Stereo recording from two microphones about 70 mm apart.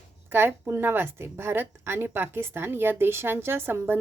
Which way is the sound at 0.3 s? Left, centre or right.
Right.